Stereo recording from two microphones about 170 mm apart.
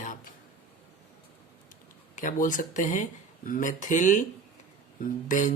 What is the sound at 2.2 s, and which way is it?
Mantra, 50° left (ahead or behind).